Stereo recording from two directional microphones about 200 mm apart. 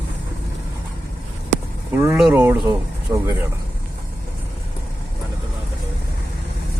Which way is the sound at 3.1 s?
20° right (ahead or behind).